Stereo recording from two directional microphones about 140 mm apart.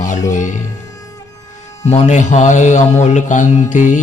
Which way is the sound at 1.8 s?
55° left (ahead or behind).